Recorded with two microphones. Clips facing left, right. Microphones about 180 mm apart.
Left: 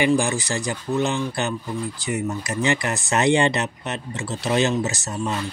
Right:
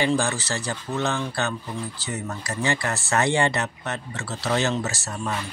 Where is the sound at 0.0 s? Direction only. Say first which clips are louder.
Left 3 dB; 15° left (ahead or behind).